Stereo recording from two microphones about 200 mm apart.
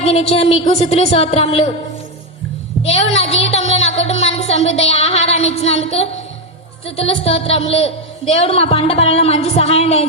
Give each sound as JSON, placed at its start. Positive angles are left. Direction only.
{"t": 0.0, "sound": "a woman's voice", "side_deg": 30}
{"t": 2.8, "sound": "a woman's voice", "side_deg": 30}